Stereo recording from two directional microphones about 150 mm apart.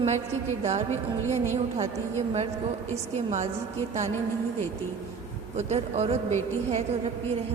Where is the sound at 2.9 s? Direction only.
45° right (ahead or behind).